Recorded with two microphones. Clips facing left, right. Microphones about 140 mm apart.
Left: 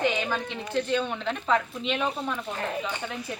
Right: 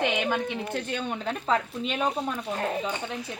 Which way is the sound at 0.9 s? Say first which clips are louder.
Left 3 dB; 40° right (ahead or behind).